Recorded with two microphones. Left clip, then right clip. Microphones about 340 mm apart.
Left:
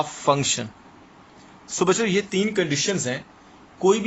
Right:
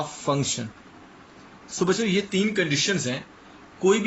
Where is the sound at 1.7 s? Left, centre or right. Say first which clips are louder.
Left 3 dB; left.